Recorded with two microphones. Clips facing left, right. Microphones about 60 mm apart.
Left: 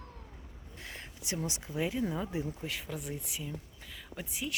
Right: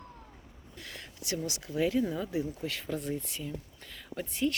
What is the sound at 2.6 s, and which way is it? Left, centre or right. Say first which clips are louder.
Speech: right 4 dB; centre.